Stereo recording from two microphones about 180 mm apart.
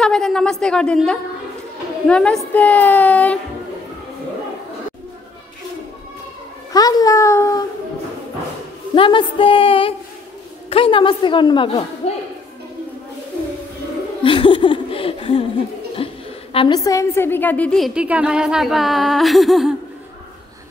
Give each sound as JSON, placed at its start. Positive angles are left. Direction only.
{"t": 0.0, "sound": "a woman's voice", "side_deg": 5}
{"t": 6.7, "sound": "a woman's voice", "side_deg": 20}
{"t": 8.9, "sound": "a woman's voice", "side_deg": 30}
{"t": 14.2, "sound": "speech", "side_deg": 30}
{"t": 16.0, "sound": "chuckle", "side_deg": 30}
{"t": 16.5, "sound": "a woman's voice", "side_deg": 25}